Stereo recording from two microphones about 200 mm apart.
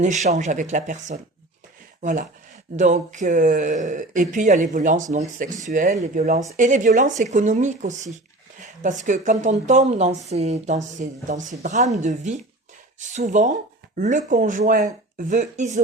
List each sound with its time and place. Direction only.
0.0 s speech: 35° right (ahead or behind)